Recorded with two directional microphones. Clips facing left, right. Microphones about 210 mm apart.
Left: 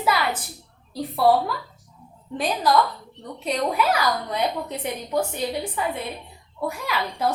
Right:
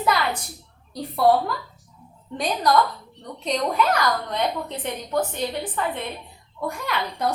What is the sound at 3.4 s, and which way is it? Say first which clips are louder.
A woman's voice: even; 5° left (ahead or behind).